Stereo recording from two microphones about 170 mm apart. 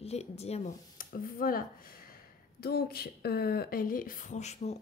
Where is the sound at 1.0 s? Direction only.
55° left (ahead or behind).